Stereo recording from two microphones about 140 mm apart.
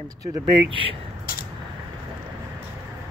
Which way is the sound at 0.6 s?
40° right (ahead or behind).